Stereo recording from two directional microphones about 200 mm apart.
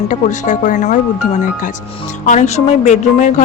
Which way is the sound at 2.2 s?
35° left (ahead or behind).